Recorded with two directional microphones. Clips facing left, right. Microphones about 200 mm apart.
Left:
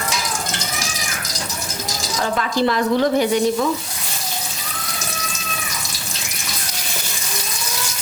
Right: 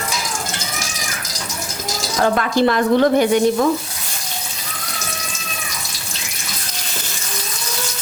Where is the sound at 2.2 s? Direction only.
55° right (ahead or behind).